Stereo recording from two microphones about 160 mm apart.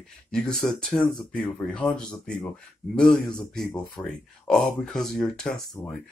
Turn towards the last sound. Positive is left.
turn(degrees=20)  # may be behind; listen again after turning